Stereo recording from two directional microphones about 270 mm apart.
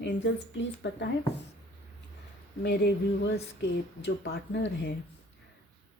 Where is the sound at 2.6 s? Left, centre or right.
Left.